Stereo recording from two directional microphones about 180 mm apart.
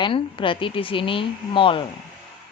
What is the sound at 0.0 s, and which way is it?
A woman's voice, 30° left (ahead or behind).